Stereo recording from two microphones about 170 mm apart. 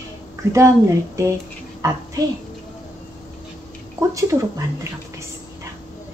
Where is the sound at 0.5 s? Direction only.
15° right (ahead or behind).